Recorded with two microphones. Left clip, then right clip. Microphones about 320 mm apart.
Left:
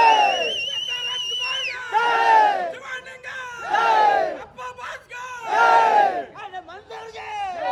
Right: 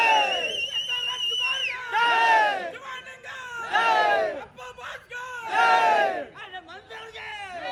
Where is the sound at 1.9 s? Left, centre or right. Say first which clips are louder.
Left 3 dB; left.